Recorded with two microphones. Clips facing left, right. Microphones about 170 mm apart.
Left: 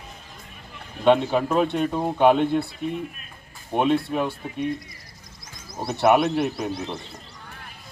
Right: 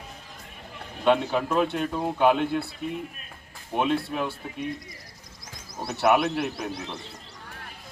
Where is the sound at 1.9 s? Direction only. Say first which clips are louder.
Left 5 dB; 25° left (ahead or behind).